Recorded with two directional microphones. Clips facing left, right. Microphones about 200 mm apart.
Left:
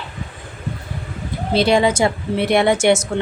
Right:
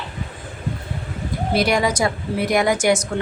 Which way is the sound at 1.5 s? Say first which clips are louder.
Left 4 dB; 25° left (ahead or behind).